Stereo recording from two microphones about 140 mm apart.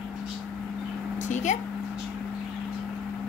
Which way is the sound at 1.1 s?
60° left (ahead or behind).